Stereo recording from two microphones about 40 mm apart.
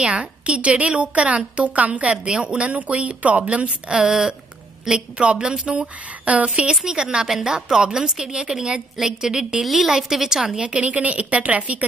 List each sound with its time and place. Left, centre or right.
0.0 s a woman's voice: right
6.8 s a woman's voice: centre
9.6 s a woman's voice: centre
10.6 s a woman's voice: right